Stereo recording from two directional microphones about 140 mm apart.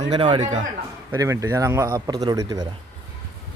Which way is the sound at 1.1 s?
20° right (ahead or behind).